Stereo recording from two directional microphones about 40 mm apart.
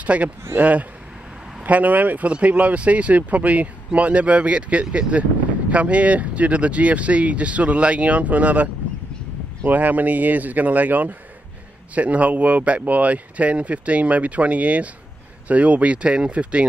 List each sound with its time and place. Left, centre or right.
0.0 s speech: right
9.7 s speech: right